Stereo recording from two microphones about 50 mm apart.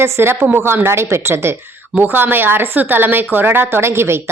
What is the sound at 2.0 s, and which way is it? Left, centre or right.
A woman's voice, right.